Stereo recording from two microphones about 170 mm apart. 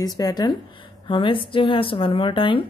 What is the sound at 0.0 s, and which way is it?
A woman's voice, 25° left (ahead or behind).